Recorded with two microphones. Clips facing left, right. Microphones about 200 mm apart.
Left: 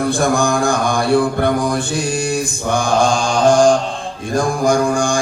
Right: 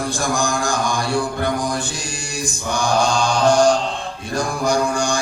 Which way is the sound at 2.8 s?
50° left (ahead or behind).